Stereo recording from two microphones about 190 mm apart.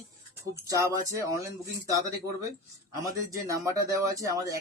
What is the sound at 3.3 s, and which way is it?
Speech, 15° right (ahead or behind).